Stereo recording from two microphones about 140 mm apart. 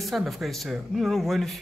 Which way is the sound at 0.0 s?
Centre (ahead or behind).